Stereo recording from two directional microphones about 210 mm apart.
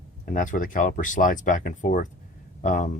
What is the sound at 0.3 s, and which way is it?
Speech, 40° left (ahead or behind).